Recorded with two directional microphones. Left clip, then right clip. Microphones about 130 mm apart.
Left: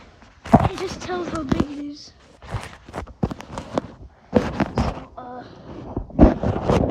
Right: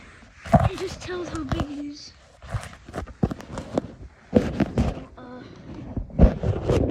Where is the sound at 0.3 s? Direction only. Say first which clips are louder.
Left 3 dB; centre (ahead or behind).